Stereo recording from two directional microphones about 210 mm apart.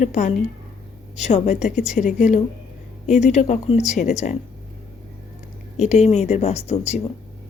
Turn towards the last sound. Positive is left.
turn(degrees=30)  # may be behind; listen again after turning